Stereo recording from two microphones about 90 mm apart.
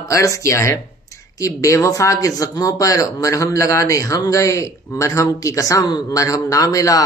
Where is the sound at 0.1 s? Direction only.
35° left (ahead or behind).